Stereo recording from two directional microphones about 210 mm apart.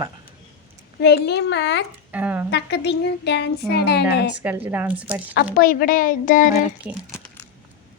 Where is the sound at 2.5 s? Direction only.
50° left (ahead or behind).